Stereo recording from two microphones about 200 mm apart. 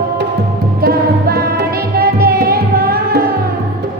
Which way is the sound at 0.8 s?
50° right (ahead or behind).